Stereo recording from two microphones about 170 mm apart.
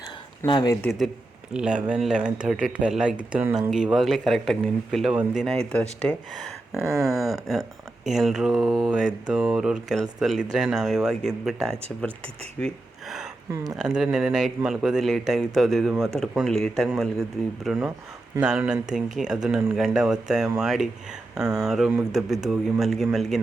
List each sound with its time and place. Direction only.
0.4 s speech: 25° left (ahead or behind)
0.8 s speech: centre (ahead or behind)
6.8 s a sound: 20° right (ahead or behind)
7.2 s speech: centre (ahead or behind)
12.5 s speech: centre (ahead or behind)